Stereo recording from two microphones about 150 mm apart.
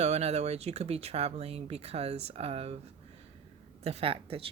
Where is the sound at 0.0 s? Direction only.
45° right (ahead or behind).